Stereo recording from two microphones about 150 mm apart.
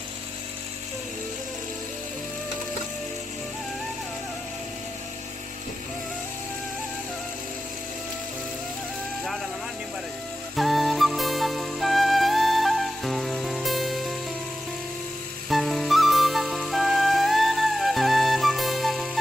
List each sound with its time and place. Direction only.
10.5 s music: centre (ahead or behind)
15.4 s flute: centre (ahead or behind)